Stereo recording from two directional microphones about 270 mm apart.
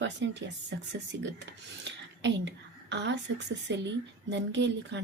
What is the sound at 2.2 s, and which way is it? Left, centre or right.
A woman's voice, right.